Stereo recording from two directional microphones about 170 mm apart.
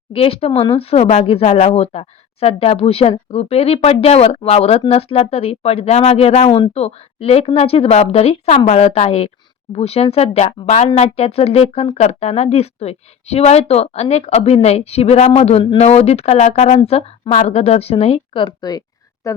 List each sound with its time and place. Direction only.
0.1 s speech: 35° left (ahead or behind); by 19.4 s 20° left (ahead or behind)